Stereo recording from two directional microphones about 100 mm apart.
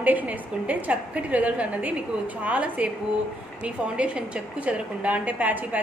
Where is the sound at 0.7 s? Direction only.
15° right (ahead or behind).